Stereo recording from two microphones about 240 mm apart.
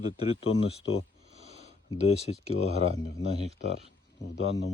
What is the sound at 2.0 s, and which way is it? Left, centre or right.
Speech, left.